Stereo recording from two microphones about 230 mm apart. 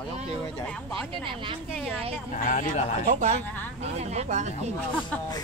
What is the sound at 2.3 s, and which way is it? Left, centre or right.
Speech, left.